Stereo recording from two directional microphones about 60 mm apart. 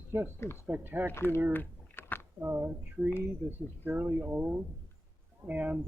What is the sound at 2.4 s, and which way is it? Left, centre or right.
Speech, right.